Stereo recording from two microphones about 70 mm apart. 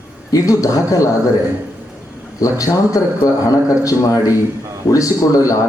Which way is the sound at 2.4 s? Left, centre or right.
Left.